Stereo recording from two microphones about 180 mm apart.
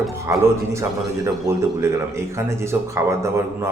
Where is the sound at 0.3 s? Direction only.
15° right (ahead or behind).